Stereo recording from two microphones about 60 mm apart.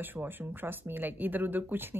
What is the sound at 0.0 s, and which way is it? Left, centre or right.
Speech, right.